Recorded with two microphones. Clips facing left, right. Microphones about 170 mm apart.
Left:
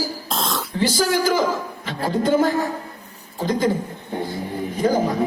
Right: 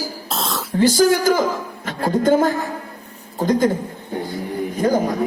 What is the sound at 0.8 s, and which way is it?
A man's voice, 50° right (ahead or behind).